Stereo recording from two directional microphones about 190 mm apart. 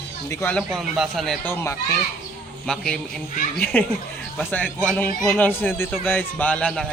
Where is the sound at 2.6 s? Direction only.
Centre (ahead or behind).